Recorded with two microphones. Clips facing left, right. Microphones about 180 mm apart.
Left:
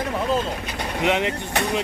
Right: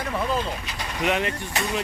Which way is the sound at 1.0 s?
20° left (ahead or behind).